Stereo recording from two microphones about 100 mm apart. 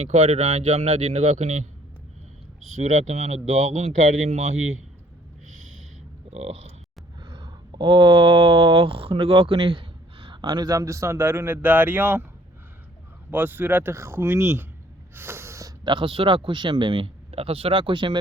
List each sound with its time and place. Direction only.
0.0 s speech: 90° right
2.9 s speech: 90° right
7.2 s speech: 50° right (ahead or behind); by 12.2 s 15° right (ahead or behind)
13.3 s speech: 20° right (ahead or behind)
15.1 s snort: 25° right (ahead or behind)
15.8 s a man's voice: 55° right (ahead or behind)